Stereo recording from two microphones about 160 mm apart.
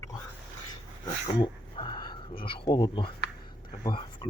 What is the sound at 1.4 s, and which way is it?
Speech, 30° left (ahead or behind).